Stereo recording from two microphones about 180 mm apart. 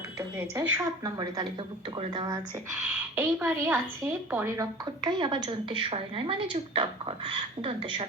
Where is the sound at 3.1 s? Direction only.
10° right (ahead or behind).